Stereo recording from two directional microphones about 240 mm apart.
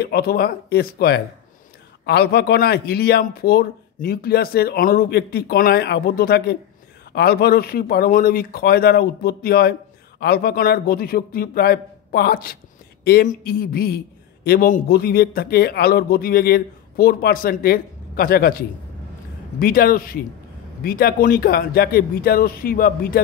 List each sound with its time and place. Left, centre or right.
0.0 s a man's voice: left